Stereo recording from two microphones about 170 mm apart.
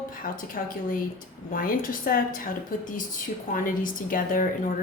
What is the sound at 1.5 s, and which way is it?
Speech, 55° left (ahead or behind).